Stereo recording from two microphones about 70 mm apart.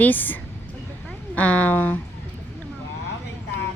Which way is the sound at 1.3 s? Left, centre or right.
Left.